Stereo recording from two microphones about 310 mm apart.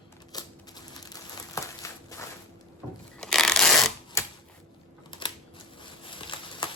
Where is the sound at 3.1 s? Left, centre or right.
Centre.